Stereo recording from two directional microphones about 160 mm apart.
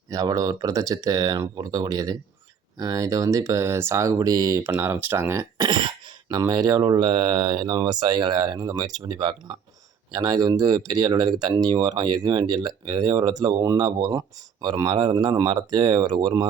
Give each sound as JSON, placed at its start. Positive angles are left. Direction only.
{"t": 0.1, "sound": "speech", "side_deg": -20}